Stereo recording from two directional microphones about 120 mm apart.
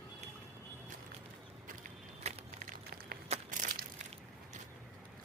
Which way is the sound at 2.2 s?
90° right.